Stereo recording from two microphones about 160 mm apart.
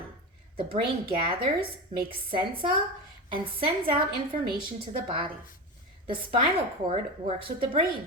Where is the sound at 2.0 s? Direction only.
35° right (ahead or behind).